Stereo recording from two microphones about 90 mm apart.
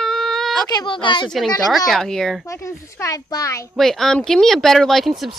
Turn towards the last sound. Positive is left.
turn(degrees=0)  # may be behind; listen again after turning